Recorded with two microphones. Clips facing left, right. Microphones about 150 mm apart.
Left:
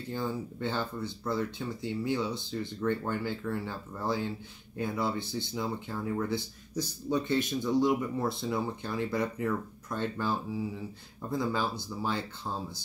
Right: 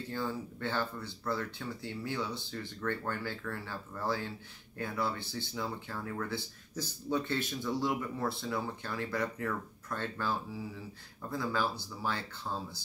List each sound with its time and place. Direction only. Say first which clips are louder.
0.1 s speech: left 4 dB; 15° left (ahead or behind)